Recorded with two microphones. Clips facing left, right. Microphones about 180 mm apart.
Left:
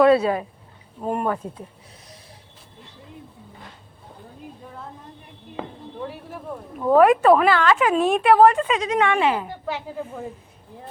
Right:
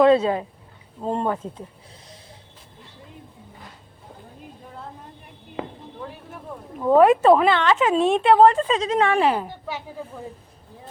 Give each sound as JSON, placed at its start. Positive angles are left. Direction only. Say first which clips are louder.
{"t": 0.0, "sound": "speech", "louder": "even", "side_deg": -20}
{"t": 6.9, "sound": "speech", "louder": "even", "side_deg": -25}